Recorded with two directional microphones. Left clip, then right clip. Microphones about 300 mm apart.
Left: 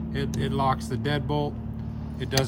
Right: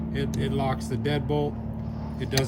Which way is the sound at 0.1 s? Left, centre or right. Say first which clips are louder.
Even; centre.